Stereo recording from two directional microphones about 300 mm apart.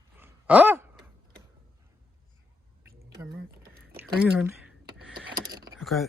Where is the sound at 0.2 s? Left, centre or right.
Centre.